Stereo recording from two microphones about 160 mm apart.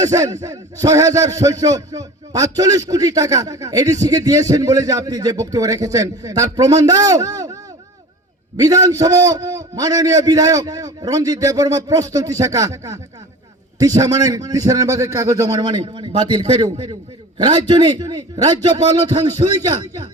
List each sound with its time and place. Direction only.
0.0 s speech: 20° right (ahead or behind)